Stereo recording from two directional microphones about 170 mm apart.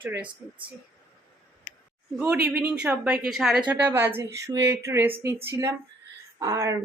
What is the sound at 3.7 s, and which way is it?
Speech, 10° right (ahead or behind).